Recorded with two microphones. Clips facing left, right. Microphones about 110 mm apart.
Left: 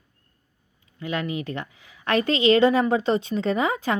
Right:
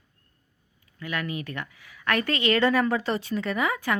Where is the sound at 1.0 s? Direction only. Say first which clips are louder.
Left 4 dB; 25° left (ahead or behind).